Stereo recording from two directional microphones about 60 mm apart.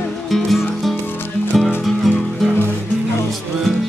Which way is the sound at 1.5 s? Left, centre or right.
Centre.